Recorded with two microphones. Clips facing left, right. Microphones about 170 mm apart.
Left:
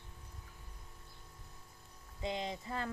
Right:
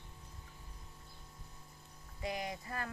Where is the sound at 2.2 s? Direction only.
25° left (ahead or behind).